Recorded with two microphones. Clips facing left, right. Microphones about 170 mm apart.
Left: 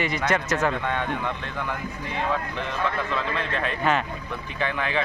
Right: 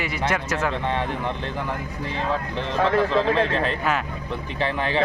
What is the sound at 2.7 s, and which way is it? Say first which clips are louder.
Speech: right 9 dB; 90° right.